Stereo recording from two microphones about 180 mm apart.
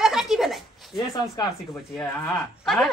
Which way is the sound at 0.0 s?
Centre (ahead or behind).